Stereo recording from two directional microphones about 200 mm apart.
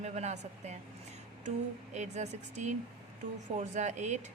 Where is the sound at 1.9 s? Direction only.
35° right (ahead or behind).